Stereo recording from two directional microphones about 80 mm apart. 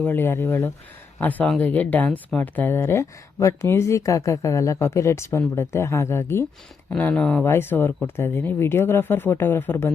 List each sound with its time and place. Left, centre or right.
0.0 s speech: left
7.2 s speech: centre
7.4 s speech: left